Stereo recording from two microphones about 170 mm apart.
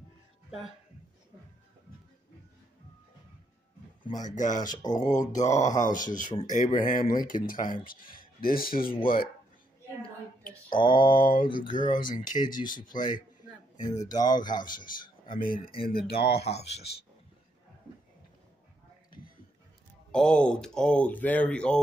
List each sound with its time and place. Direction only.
4.1 s speech: 45° left (ahead or behind)
10.8 s speech: 30° left (ahead or behind)
11.1 s speech: 55° left (ahead or behind)
11.4 s speech: 30° left (ahead or behind)
12.0 s speech: 50° left (ahead or behind)
14.1 s speech: 25° left (ahead or behind)
14.6 s speech: 55° left (ahead or behind)
16.1 s speech: 70° left (ahead or behind)
16.5 s speech: 40° left (ahead or behind)
20.1 s speech: 5° left (ahead or behind)